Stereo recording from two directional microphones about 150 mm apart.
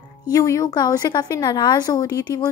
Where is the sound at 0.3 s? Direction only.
25° left (ahead or behind).